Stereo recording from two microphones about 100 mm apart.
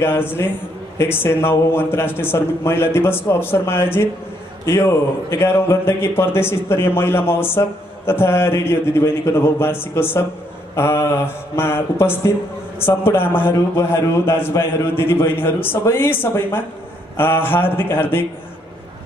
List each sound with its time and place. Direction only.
0.0 s speech: 25° left (ahead or behind)